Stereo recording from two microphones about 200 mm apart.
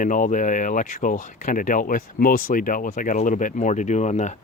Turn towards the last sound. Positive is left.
turn(degrees=35)  # may be behind; listen again after turning